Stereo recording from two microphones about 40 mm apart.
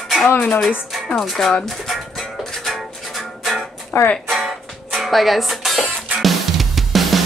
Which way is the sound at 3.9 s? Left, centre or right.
Left.